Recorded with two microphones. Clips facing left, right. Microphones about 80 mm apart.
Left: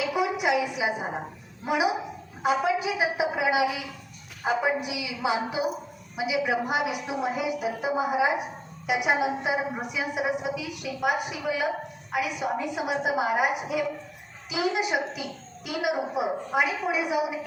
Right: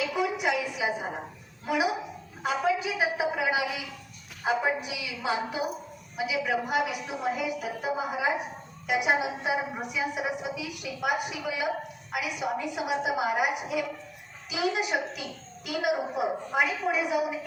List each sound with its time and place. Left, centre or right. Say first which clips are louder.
0.0 s a sound: left 2 dB; centre
1.6 s a woman's voice: left 2 dB; centre
8.9 s a woman's voice: left 2 dB; centre